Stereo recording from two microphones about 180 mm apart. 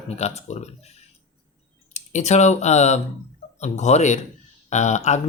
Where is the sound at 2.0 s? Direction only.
40° left (ahead or behind).